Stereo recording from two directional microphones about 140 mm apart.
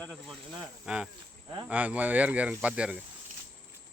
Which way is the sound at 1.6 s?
10° right (ahead or behind).